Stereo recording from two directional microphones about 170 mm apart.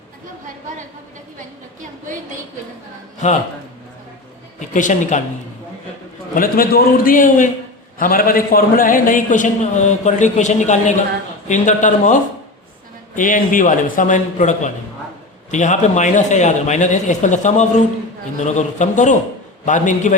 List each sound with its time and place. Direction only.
4.7 s a man's voice: 45° left (ahead or behind)
6.3 s a man's voice: 55° left (ahead or behind)